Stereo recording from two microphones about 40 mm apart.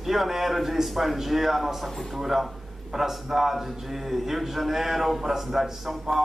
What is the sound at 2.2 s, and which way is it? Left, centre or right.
A man's voice, centre.